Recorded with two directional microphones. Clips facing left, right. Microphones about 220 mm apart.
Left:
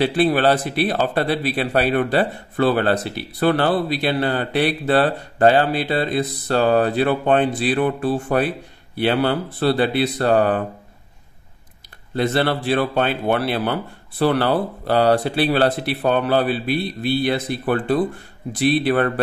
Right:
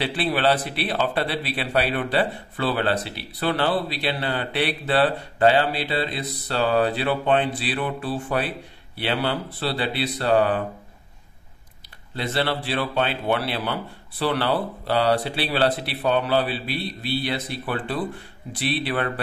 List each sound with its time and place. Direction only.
0.0 s speech: 45° left (ahead or behind)
12.2 s speech: 50° left (ahead or behind)